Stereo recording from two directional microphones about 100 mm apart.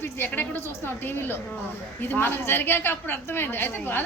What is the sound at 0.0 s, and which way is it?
A woman's voice, 20° left (ahead or behind).